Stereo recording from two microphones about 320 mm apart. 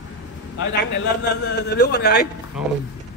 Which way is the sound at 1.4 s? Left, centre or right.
Left.